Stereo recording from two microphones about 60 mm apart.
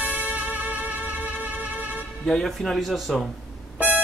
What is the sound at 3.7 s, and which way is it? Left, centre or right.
Beep, right.